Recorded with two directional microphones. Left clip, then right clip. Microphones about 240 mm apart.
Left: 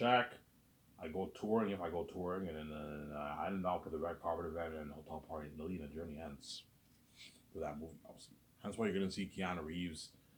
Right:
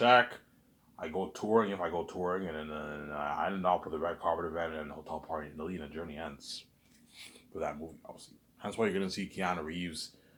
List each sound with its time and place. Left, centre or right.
0.0 s speech: right